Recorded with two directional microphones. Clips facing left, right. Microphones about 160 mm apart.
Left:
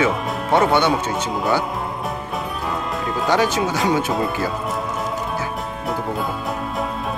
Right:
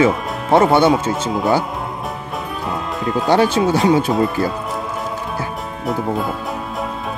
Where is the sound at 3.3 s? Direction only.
30° right (ahead or behind).